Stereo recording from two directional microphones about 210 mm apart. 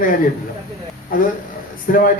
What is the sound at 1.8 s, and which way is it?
Speech, 40° left (ahead or behind).